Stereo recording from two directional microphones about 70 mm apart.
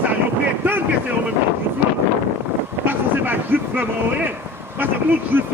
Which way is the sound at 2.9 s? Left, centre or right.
Right.